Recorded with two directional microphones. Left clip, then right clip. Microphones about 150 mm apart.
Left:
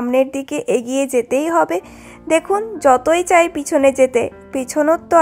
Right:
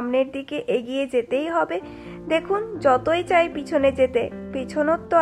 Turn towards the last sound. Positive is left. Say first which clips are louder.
# left 6 dB
turn(degrees=40)  # may be behind; listen again after turning